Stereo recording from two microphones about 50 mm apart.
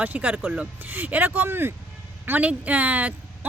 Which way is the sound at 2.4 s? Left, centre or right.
Right.